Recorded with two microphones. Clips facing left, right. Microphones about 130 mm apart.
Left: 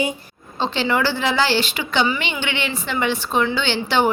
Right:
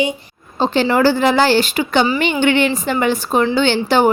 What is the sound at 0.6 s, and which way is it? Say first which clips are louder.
A woman's voice: right 6 dB; 45° right (ahead or behind).